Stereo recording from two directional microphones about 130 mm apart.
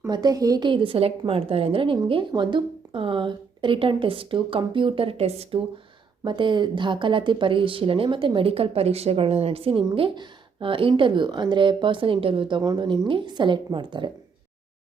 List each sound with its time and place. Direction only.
0.1 s speech: 30° right (ahead or behind); by 5.6 s 50° right (ahead or behind)
6.2 s speech: 35° right (ahead or behind)